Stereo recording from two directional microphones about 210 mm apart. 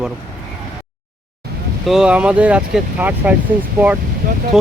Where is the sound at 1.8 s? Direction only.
5° right (ahead or behind).